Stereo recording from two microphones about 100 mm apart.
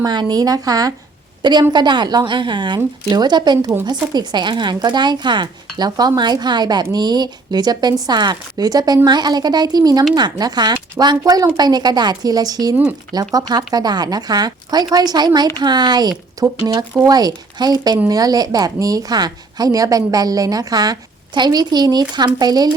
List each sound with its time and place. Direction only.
0.0 s a woman's voice: 45° right (ahead or behind)
11.0 s a woman's voice: 30° right (ahead or behind)
11.5 s a woman's voice: 45° right (ahead or behind)